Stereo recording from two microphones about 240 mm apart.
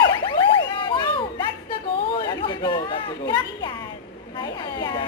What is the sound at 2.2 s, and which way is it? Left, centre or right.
Speech, centre.